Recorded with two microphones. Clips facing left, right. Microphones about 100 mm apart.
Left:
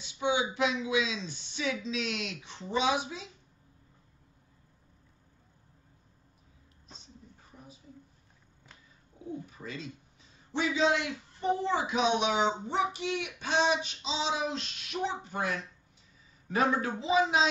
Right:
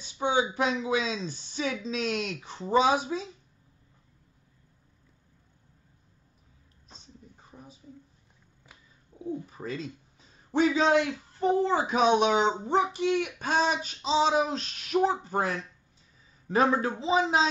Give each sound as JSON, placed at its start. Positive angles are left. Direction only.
{"t": 0.0, "sound": "speech", "side_deg": -40}
{"t": 9.2, "sound": "speech", "side_deg": -40}